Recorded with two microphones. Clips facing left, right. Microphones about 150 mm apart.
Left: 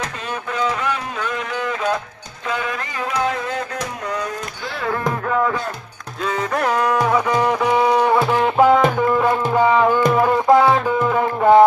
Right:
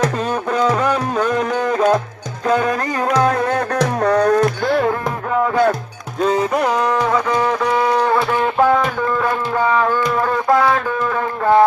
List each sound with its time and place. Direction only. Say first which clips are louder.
0.5 s music: right 5 dB; 40° right (ahead or behind)
3.8 s music: right 10 dB; 65° right (ahead or behind); by 4.9 s 50° right (ahead or behind)
6.8 s livestock: even; 10° left (ahead or behind)
10.1 s music: left 2 dB; 15° left (ahead or behind)